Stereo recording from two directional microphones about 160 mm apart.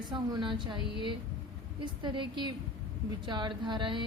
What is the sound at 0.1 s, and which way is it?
Speech, 30° right (ahead or behind).